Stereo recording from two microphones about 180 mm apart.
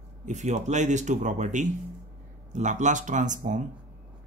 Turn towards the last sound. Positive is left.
turn(degrees=-45)  # may be behind; listen again after turning